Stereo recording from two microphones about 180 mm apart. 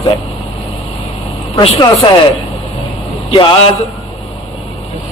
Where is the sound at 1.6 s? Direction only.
30° left (ahead or behind).